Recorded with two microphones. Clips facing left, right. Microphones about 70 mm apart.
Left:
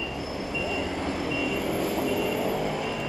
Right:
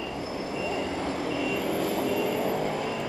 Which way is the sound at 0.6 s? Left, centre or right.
Right.